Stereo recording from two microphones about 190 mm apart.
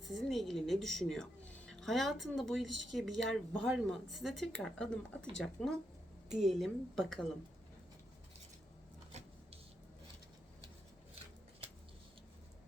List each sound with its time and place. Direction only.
0.0 s a woman's voice: centre (ahead or behind)
9.1 s vehicle: 35° right (ahead or behind)